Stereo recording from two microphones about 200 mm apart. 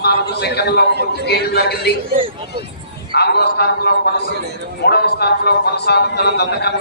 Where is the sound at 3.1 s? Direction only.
55° left (ahead or behind).